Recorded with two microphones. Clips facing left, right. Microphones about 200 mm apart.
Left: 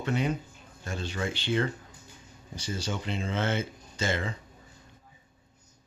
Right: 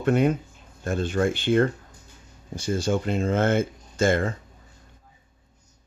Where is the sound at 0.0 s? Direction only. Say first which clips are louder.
Right 8 dB; 50° right (ahead or behind).